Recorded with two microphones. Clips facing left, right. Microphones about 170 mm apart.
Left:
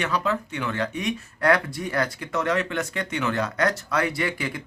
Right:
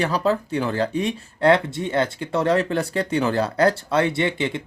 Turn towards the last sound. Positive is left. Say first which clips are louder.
# right 5 dB
turn(degrees=-25)  # may be behind; listen again after turning